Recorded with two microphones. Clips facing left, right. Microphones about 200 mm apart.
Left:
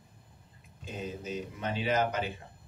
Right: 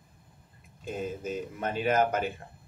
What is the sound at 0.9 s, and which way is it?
Speech, 50° right (ahead or behind).